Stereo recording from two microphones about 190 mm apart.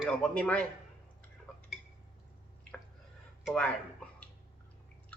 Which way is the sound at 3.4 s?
5° left (ahead or behind).